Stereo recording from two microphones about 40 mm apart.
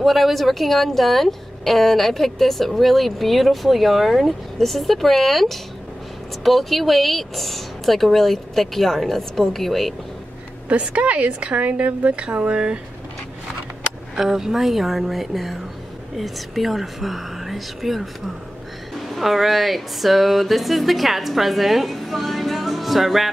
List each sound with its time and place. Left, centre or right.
0.0 s speech: centre
10.7 s a woman's voice: right
14.1 s speech: centre
19.0 s speech: centre